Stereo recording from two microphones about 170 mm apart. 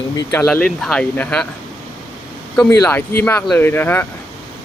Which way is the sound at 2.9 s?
10° left (ahead or behind).